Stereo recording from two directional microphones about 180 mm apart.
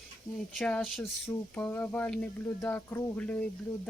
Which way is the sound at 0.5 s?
Centre (ahead or behind).